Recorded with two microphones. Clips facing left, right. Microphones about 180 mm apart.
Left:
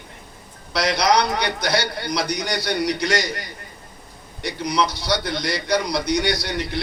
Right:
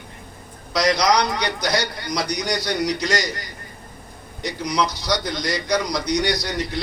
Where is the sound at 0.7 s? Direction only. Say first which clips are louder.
Even; 60° left (ahead or behind).